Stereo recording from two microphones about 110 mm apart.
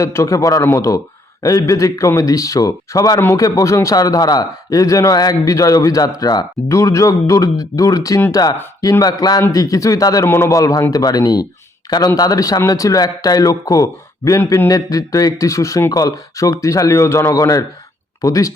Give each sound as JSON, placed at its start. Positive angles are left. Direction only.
{"t": 0.0, "sound": "a man's voice", "side_deg": 30}
{"t": 3.2, "sound": "a man's voice", "side_deg": 20}